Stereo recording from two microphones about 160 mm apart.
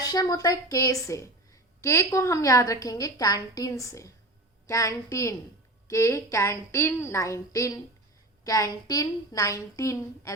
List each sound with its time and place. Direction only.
0.0 s a woman's voice: 25° left (ahead or behind)